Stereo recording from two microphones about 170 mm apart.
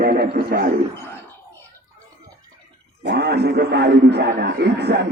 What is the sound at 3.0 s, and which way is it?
A man's voice, 80° right.